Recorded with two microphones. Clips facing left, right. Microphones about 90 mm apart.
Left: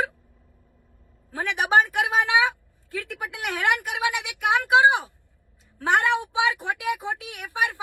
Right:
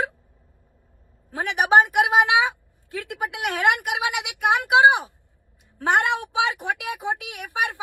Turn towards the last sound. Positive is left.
turn(degrees=-20)  # may be behind; listen again after turning